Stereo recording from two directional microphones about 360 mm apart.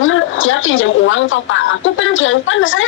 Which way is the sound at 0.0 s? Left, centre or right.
Left.